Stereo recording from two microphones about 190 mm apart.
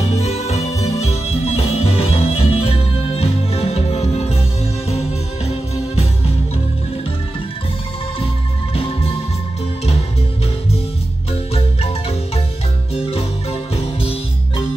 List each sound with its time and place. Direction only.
0.0 s music: 35° left (ahead or behind)
11.5 s marimba: 30° left (ahead or behind)
12.9 s music: 30° left (ahead or behind)